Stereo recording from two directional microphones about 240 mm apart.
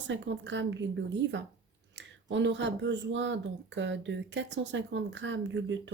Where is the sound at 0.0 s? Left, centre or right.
Right.